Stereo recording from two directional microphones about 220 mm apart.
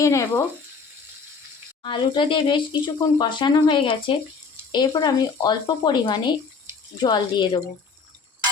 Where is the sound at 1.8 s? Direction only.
20° left (ahead or behind).